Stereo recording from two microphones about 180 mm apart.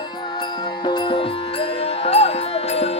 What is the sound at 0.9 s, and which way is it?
Music, 25° left (ahead or behind).